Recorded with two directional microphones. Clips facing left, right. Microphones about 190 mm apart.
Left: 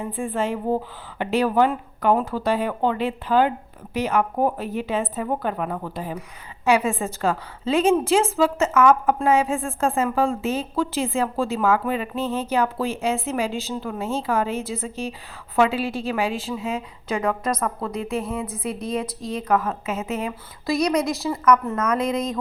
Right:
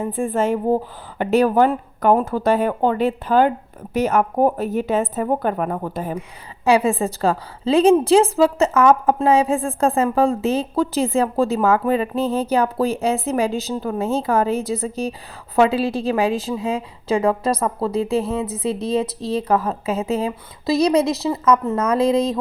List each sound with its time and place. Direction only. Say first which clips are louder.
0.0 s speech: right 5 dB; 45° right (ahead or behind)
6.7 s a woman's voice: right 4 dB; 35° right (ahead or behind)